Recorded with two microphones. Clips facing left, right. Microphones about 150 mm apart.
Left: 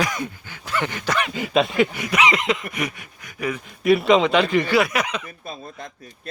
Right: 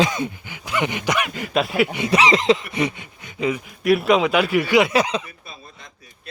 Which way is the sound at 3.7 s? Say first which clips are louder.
Left 2 dB; centre (ahead or behind).